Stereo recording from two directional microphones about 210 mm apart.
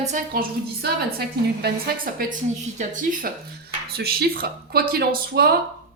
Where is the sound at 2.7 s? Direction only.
40° right (ahead or behind).